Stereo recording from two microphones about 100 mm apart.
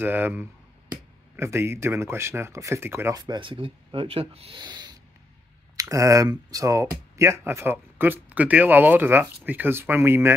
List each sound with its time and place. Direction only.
0.0 s speech: 20° right (ahead or behind)
3.2 s speech: 50° right (ahead or behind); by 4.6 s 80° right
4.6 s rub: 45° right (ahead or behind)
5.8 s speech: 35° right (ahead or behind)